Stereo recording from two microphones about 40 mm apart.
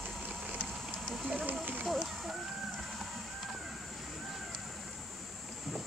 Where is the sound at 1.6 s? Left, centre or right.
Right.